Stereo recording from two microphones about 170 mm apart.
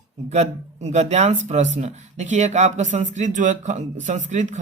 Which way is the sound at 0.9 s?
40° right (ahead or behind).